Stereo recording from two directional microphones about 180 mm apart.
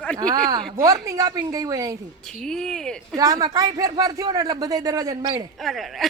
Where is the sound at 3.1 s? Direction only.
20° right (ahead or behind).